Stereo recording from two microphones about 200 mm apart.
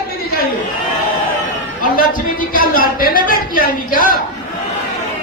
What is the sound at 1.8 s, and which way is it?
Speech, 45° left (ahead or behind).